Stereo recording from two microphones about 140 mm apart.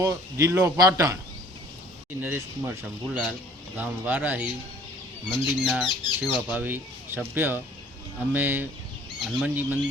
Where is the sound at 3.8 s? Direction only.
10° right (ahead or behind).